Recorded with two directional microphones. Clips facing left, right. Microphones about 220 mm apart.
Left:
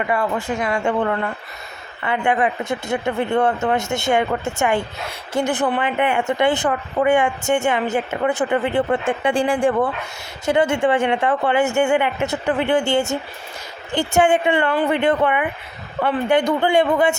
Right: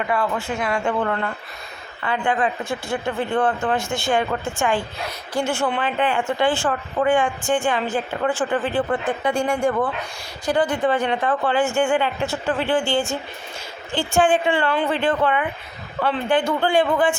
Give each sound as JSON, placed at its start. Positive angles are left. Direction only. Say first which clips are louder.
{"t": 0.3, "sound": "speech", "louder": "left 2 dB", "side_deg": -5}
{"t": 1.0, "sound": "speech", "louder": "left 2 dB", "side_deg": 10}